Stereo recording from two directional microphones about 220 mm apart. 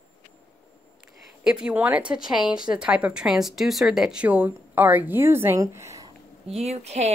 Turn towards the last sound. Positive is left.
turn(degrees=-30)  # may be behind; listen again after turning